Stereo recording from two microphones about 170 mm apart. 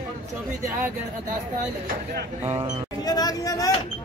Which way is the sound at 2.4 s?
15° right (ahead or behind).